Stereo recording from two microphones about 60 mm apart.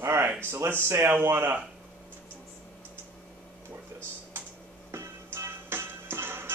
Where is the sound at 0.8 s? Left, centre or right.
Right.